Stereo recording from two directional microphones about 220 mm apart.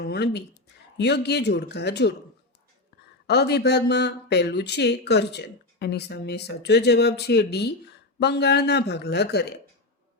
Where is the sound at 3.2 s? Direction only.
50° left (ahead or behind).